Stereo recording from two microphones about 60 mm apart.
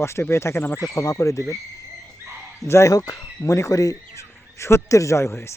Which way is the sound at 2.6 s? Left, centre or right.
Left.